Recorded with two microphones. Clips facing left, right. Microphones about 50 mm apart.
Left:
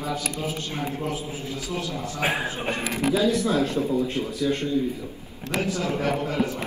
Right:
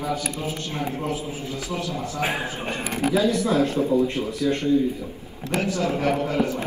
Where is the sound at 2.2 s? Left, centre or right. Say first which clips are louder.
Left 1 dB; left.